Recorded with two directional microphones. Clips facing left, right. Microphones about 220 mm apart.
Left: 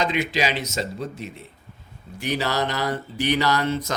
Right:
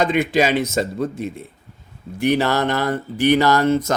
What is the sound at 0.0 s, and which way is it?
Speech, 55° right (ahead or behind).